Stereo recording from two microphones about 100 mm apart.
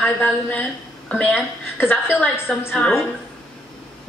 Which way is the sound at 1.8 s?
20° left (ahead or behind).